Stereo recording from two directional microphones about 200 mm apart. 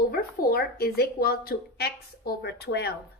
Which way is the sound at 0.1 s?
50° left (ahead or behind).